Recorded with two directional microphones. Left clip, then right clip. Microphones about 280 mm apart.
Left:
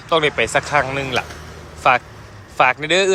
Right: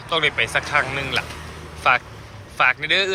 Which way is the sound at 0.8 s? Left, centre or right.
Centre.